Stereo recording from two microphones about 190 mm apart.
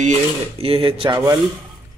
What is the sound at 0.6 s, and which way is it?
Speech, 30° right (ahead or behind).